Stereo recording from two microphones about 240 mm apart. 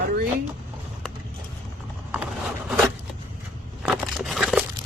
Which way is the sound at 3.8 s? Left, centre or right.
Centre.